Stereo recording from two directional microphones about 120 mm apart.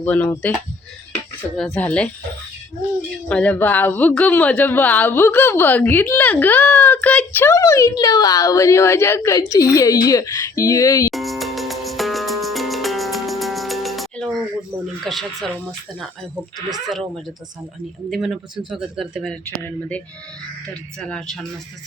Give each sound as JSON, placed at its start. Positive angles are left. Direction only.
{"t": 0.0, "sound": "speech", "side_deg": 15}
{"t": 1.5, "sound": "speech", "side_deg": 0}
{"t": 3.2, "sound": "a woman's voice", "side_deg": 10}
{"t": 11.1, "sound": "music", "side_deg": 0}
{"t": 15.0, "sound": "speech", "side_deg": 0}
{"t": 16.6, "sound": "speech", "side_deg": -35}
{"t": 18.1, "sound": "speech", "side_deg": 0}
{"t": 19.5, "sound": "speech", "side_deg": 20}
{"t": 21.1, "sound": "speech", "side_deg": 5}